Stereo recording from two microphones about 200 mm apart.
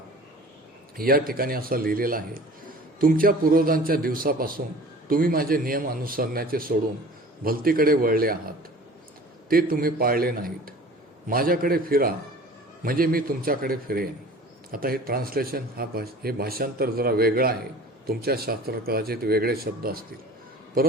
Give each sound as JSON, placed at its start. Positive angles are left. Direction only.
{"t": 0.9, "sound": "speech", "side_deg": -45}
{"t": 9.5, "sound": "speech", "side_deg": -45}